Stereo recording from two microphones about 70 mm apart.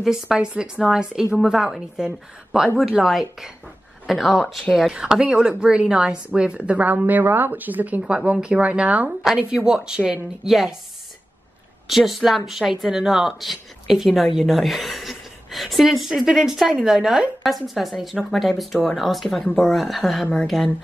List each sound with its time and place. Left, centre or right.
0.0 s a woman's voice: centre; by 8.0 s right
8.0 s a woman's voice: centre
11.9 s a woman's voice: centre